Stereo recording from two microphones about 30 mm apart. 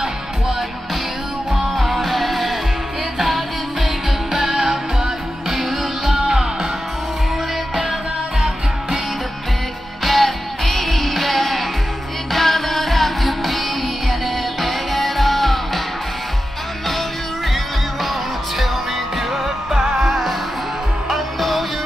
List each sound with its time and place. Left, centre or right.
1.5 s music: centre
10.0 s music: centre
19.1 s music: centre
19.7 s music: centre